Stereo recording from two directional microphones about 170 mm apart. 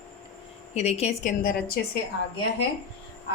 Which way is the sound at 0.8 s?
40° left (ahead or behind).